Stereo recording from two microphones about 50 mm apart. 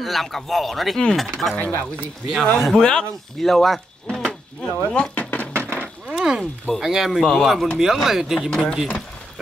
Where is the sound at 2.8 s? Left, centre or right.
Centre.